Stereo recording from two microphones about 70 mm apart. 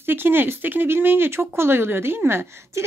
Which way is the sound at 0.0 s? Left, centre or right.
Right.